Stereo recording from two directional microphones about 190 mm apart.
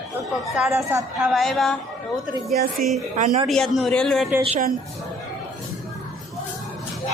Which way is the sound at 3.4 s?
Centre (ahead or behind).